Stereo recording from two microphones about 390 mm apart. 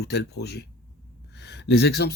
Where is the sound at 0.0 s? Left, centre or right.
Left.